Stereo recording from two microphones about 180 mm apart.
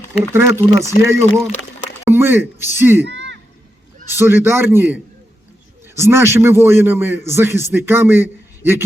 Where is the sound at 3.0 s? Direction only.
80° right.